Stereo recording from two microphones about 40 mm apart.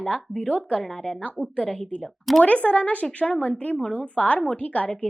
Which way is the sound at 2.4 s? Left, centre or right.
Left.